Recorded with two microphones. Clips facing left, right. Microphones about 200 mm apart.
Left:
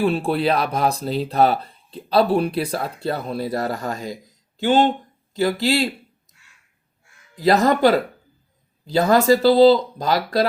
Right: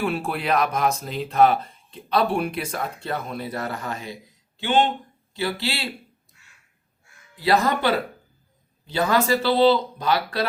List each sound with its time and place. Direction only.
0.0 s speech: 30° left (ahead or behind)
7.3 s speech: 40° left (ahead or behind)